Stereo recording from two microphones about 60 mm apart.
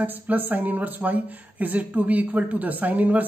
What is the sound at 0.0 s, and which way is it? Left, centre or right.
Speech, right.